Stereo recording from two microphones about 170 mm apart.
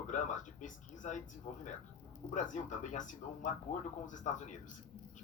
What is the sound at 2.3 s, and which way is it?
Speech, 45° left (ahead or behind).